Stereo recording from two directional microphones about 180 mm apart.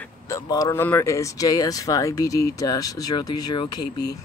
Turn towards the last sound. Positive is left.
turn(degrees=25)  # may be behind; listen again after turning